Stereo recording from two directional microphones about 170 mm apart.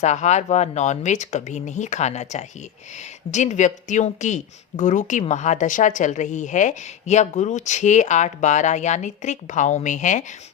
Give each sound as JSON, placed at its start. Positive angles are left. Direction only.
{"t": 0.0, "sound": "a woman's voice", "side_deg": 45}